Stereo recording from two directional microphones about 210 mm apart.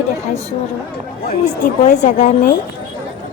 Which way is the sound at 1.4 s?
35° left (ahead or behind).